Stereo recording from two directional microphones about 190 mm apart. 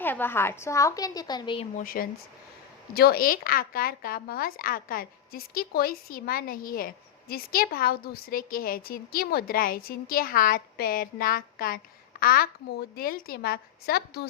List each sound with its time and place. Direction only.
0.0 s a woman's voice: 10° left (ahead or behind)
1.8 s speech: 50° left (ahead or behind)